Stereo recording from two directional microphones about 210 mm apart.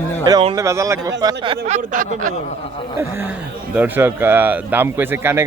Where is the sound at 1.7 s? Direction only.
35° right (ahead or behind).